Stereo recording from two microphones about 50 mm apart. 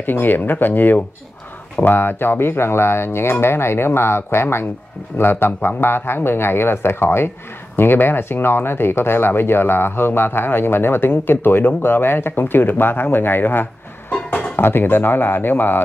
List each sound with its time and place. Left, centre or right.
0.0 s speech: left